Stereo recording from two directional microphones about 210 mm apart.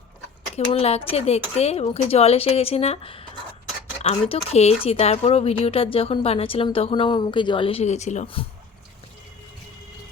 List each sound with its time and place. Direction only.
0.5 s speech: 30° left (ahead or behind)